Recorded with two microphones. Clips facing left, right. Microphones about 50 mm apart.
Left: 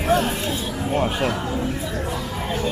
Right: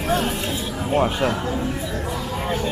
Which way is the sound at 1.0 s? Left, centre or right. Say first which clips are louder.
Right 1 dB; centre.